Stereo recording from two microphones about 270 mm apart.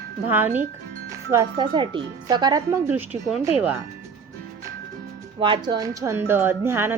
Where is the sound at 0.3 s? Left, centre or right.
Centre.